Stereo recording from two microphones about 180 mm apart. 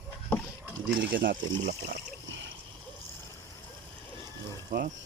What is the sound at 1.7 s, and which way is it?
Speech, 65° right (ahead or behind).